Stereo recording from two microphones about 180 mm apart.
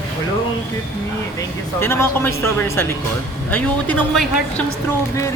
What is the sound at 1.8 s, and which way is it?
A man's voice, 15° left (ahead or behind).